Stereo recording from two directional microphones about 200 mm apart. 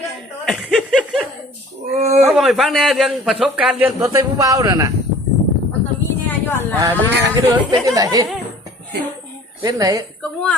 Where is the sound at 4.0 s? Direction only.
15° right (ahead or behind).